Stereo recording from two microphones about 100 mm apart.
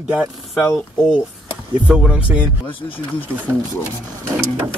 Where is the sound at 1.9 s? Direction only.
10° right (ahead or behind).